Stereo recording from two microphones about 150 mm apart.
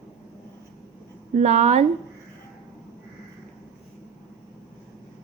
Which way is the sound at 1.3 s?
50° right (ahead or behind).